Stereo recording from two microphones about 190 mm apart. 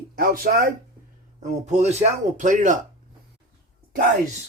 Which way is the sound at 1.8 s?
35° right (ahead or behind).